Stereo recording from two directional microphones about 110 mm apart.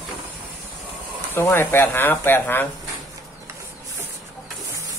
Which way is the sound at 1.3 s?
20° left (ahead or behind).